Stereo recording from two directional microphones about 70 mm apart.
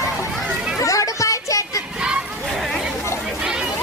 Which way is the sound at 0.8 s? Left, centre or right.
Left.